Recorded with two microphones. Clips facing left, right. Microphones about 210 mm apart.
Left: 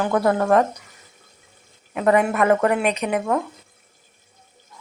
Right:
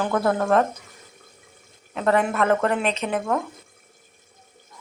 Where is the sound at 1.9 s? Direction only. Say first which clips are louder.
Left 3 dB; 10° left (ahead or behind).